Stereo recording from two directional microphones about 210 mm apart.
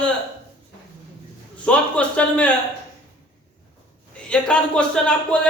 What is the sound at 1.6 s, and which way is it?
Speech, 5° left (ahead or behind).